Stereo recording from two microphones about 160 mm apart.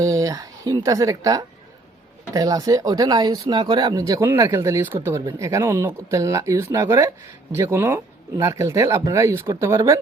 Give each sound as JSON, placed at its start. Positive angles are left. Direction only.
{"t": 0.0, "sound": "speech", "side_deg": -20}